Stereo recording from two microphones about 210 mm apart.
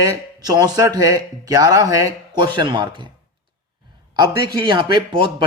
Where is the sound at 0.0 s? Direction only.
20° right (ahead or behind).